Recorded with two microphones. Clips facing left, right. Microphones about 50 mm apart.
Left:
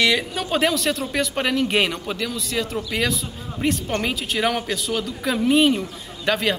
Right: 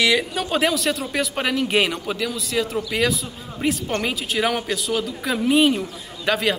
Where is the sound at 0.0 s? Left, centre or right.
Centre.